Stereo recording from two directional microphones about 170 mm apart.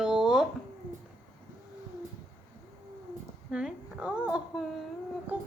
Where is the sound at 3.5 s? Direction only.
5° right (ahead or behind).